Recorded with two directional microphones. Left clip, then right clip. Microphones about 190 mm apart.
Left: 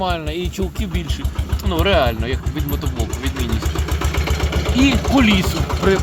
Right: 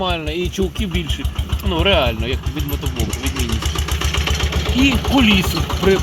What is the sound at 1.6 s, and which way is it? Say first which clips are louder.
Speech: even; 15° right (ahead or behind).